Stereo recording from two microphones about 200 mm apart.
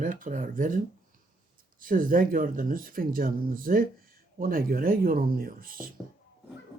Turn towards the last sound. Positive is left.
turn(degrees=-45)  # may be behind; listen again after turning